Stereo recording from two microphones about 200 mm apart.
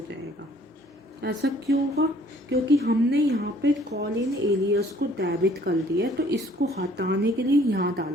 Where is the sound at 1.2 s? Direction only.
55° right (ahead or behind).